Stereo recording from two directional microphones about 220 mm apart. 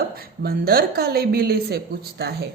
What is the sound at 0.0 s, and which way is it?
Speech, 45° right (ahead or behind).